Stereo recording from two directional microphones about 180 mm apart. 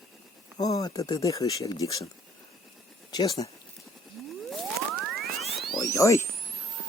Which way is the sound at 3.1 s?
20° left (ahead or behind).